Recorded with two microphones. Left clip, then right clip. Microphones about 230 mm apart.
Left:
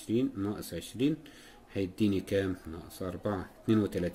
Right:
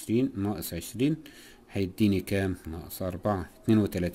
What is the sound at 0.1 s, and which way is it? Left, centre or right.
Speech, right.